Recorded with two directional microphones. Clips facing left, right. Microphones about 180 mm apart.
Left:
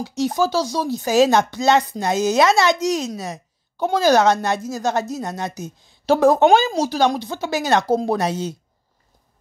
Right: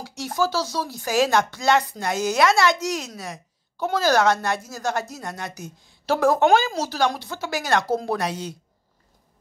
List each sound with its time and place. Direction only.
0.0 s speech: 20° left (ahead or behind)